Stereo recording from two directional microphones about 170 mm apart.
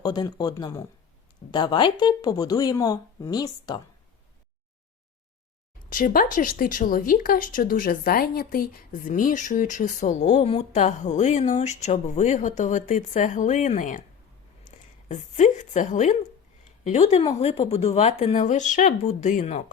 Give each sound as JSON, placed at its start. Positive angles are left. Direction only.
{"t": 0.0, "sound": "speech", "side_deg": 25}
{"t": 5.9, "sound": "speech", "side_deg": 55}
{"t": 15.1, "sound": "speech", "side_deg": 40}